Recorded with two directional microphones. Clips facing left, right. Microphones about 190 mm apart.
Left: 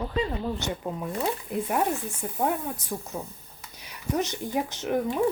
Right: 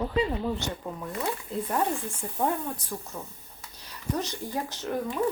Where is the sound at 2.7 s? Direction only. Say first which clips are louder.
Left 4 dB; 20° left (ahead or behind).